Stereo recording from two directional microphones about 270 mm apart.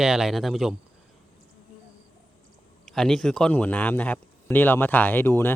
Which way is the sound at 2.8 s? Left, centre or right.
Centre.